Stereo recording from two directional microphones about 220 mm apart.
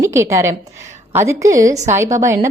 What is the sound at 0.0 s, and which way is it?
A woman's voice, 15° right (ahead or behind).